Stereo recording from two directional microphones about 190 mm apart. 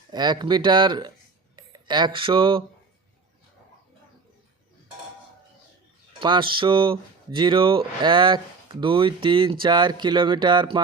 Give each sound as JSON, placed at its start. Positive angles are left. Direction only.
{"t": 0.1, "sound": "speech", "side_deg": -20}
{"t": 6.1, "sound": "speech", "side_deg": -25}